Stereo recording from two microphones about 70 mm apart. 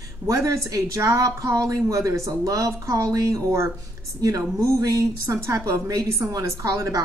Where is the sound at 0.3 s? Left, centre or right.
Right.